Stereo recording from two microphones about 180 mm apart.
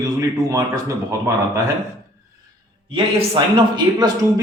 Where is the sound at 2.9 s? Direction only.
25° right (ahead or behind).